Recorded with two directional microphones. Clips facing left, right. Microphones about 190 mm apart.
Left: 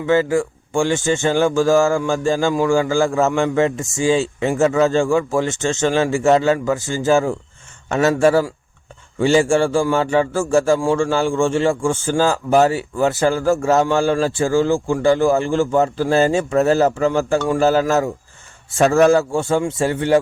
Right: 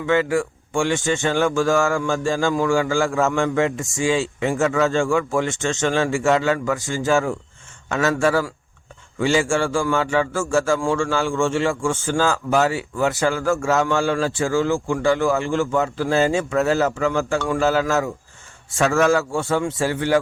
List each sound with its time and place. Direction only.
0.0 s a man's voice: 30° left (ahead or behind)
3.2 s a man's voice: 25° left (ahead or behind)
4.2 s a man's voice: 25° left (ahead or behind)